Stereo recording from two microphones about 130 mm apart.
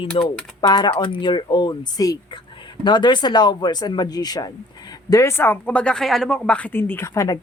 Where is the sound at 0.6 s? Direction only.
35° left (ahead or behind).